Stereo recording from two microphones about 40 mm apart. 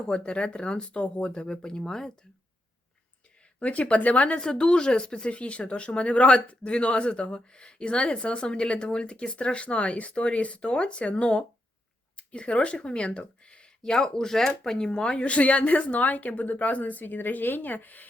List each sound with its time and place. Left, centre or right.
0.1 s speech: left
3.6 s speech: left
4.4 s speech: centre; by 18.1 s left